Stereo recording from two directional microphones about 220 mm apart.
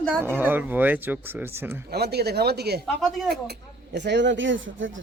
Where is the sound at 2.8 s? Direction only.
Centre (ahead or behind).